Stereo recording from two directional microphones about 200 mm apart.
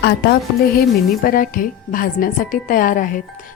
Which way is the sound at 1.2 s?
45° left (ahead or behind).